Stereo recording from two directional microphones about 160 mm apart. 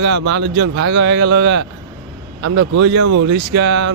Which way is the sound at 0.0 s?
90° right.